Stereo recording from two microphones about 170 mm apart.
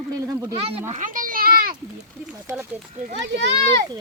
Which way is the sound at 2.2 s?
15° right (ahead or behind).